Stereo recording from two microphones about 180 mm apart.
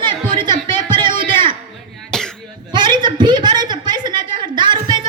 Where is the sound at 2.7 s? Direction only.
25° right (ahead or behind).